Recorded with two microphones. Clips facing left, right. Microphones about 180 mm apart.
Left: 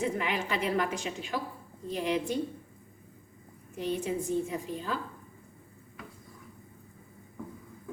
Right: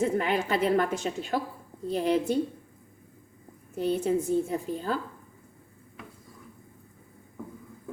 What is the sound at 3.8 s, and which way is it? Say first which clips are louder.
A woman's voice: right 6 dB; 40° right (ahead or behind).